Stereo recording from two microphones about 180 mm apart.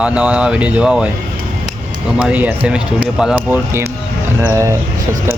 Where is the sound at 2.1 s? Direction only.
10° right (ahead or behind).